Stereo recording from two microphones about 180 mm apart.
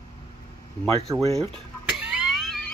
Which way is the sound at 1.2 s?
35° right (ahead or behind).